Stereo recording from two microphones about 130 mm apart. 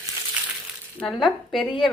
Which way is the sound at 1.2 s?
40° left (ahead or behind).